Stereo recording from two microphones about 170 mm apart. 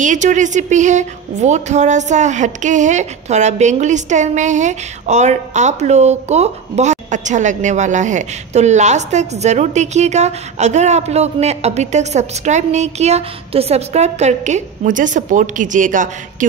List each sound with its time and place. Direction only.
0.0 s a woman's voice: 45° right (ahead or behind)